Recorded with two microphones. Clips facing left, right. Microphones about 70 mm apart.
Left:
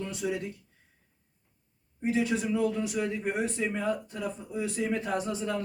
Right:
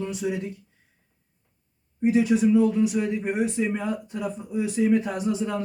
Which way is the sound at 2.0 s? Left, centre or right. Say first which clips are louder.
Right 8 dB; centre.